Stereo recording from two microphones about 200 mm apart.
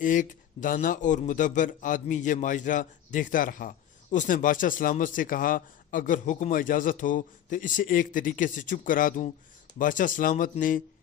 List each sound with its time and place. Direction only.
0.0 s a man's voice: 40° left (ahead or behind)